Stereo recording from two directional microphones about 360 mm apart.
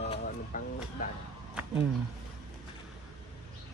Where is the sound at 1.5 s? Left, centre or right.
Centre.